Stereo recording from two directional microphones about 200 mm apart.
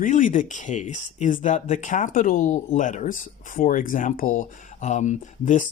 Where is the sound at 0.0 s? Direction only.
40° left (ahead or behind).